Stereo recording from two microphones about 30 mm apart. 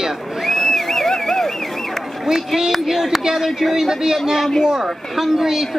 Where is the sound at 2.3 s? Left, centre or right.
Right.